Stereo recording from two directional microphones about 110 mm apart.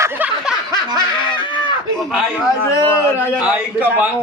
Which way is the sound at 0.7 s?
45° left (ahead or behind).